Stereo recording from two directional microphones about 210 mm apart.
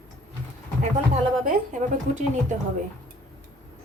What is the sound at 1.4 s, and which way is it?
A woman's voice, 35° right (ahead or behind).